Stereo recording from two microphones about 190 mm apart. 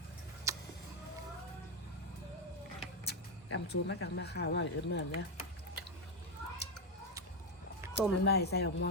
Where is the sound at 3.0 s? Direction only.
65° left (ahead or behind).